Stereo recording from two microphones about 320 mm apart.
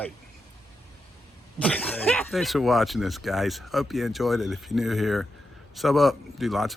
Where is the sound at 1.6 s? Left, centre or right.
Centre.